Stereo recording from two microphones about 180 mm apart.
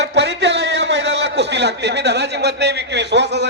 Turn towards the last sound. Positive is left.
turn(degrees=-70)  # may be behind; listen again after turning